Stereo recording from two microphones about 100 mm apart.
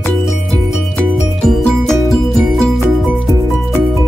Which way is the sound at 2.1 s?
Centre (ahead or behind).